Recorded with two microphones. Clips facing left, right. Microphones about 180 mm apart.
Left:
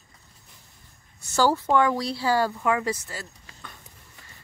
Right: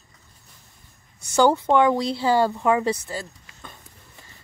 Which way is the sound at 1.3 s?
20° right (ahead or behind).